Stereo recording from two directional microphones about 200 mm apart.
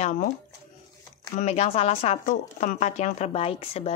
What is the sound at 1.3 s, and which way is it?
A woman's voice, 35° left (ahead or behind).